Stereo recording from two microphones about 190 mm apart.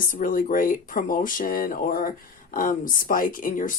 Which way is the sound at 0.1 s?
45° left (ahead or behind).